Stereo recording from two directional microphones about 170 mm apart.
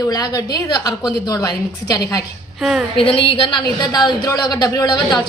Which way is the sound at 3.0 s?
35° left (ahead or behind).